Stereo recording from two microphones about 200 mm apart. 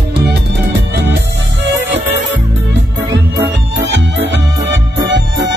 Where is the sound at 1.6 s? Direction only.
65° right (ahead or behind).